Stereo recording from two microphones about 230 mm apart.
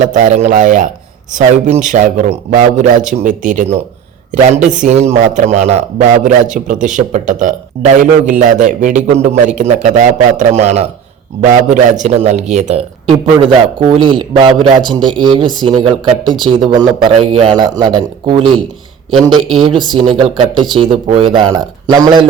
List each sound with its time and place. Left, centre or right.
0.0 s a man's voice: right
19.3 s speech: centre
19.7 s a man's voice: centre